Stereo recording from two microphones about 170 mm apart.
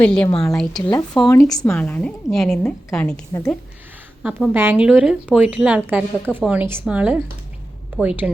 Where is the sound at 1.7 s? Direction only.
5° left (ahead or behind).